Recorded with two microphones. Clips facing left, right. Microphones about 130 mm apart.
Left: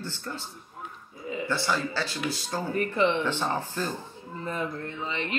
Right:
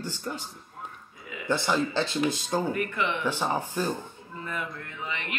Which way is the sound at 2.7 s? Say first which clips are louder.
Left 4 dB; 35° left (ahead or behind).